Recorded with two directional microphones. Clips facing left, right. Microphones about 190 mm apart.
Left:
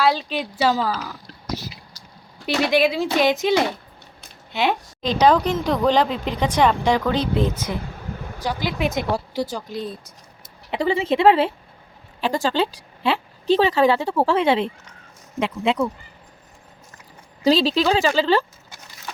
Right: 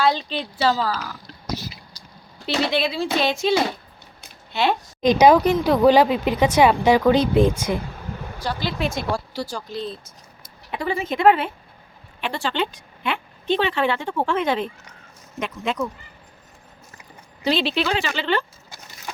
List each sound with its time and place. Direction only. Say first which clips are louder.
0.0 s speech: left 1 dB; 5° left (ahead or behind)
2.5 s speech: left 4 dB; 15° left (ahead or behind)
4.5 s speech: even; 15° left (ahead or behind)
5.0 s speech: right 3 dB; 10° right (ahead or behind)
8.4 s speech: left 2 dB; 15° left (ahead or behind)
10.7 s a woman's voice: left 5 dB; 25° left (ahead or behind)
12.2 s a woman's voice: left 4 dB; 40° left (ahead or behind)
17.4 s a woman's voice: left 4 dB; 35° left (ahead or behind)